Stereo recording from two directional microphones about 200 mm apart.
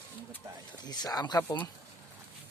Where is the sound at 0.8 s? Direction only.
20° left (ahead or behind).